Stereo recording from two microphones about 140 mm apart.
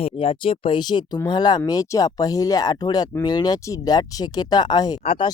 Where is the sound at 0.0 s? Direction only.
40° left (ahead or behind).